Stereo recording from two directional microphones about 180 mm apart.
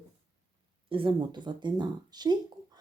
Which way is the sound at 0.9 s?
30° right (ahead or behind).